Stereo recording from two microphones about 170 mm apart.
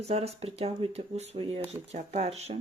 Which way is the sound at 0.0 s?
40° right (ahead or behind).